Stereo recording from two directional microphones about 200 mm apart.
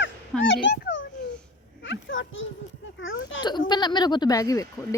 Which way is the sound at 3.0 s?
75° left (ahead or behind).